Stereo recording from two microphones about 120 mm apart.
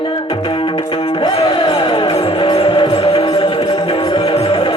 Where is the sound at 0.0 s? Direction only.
45° left (ahead or behind).